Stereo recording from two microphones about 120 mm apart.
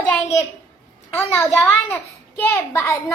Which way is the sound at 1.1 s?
20° left (ahead or behind).